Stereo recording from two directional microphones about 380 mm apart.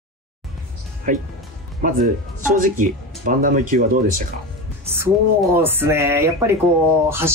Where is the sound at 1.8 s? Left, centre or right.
Right.